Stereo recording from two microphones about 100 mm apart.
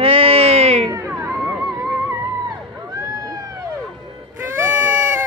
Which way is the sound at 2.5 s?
35° right (ahead or behind).